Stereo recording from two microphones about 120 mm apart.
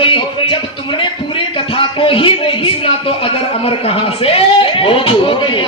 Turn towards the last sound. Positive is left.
turn(degrees=45)  # may be behind; listen again after turning